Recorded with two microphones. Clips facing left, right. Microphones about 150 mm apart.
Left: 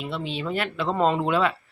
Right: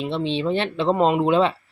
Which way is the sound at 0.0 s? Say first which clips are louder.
Right 7 dB; 25° right (ahead or behind).